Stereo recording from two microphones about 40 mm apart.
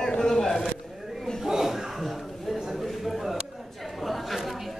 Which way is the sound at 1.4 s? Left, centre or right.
Centre.